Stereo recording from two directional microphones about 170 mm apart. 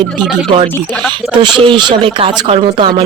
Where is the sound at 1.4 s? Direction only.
30° right (ahead or behind).